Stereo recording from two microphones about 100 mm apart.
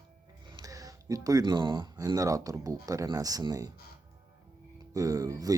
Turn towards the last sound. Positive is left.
turn(degrees=-35)  # may be behind; listen again after turning